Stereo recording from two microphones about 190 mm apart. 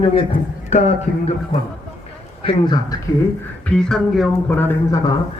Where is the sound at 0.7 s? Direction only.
40° left (ahead or behind).